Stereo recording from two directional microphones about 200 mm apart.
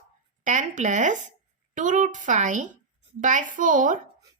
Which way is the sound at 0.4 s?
40° right (ahead or behind).